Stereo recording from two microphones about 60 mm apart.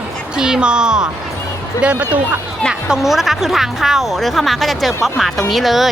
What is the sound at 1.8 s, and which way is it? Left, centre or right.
Speech, right.